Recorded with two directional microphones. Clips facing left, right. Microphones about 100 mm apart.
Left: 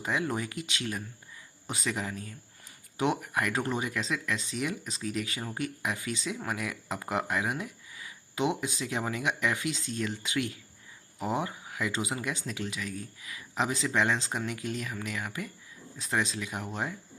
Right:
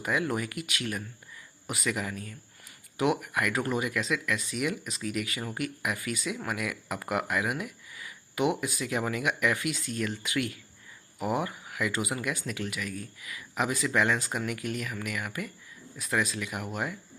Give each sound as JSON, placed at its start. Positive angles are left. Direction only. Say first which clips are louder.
{"t": 0.0, "sound": "speech", "louder": "right 2 dB", "side_deg": 25}